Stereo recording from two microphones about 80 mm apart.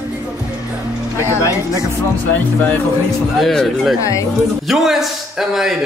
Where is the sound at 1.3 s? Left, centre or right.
Left.